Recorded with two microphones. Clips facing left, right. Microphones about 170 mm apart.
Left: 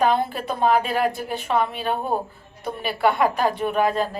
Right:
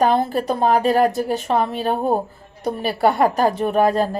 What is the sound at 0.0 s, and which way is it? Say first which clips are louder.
A woman's voice: right 3 dB; 40° right (ahead or behind).